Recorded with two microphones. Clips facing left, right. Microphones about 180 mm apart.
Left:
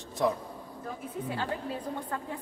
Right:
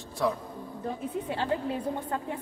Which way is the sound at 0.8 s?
25° right (ahead or behind).